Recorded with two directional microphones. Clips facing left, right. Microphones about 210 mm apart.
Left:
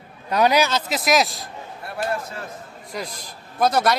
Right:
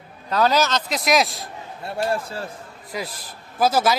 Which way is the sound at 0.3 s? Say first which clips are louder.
Left 1 dB; 15° left (ahead or behind).